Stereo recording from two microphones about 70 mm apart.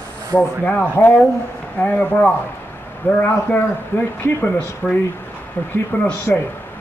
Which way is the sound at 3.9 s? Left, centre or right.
Left.